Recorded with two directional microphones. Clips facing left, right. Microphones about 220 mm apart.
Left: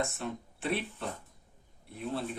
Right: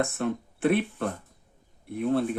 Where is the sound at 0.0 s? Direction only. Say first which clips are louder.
Right 7 dB; 55° right (ahead or behind).